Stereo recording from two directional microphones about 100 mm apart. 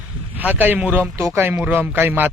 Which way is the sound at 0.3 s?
15° right (ahead or behind).